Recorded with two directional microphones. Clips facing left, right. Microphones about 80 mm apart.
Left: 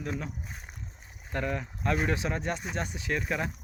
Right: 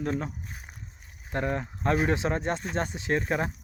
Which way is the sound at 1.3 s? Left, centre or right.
Right.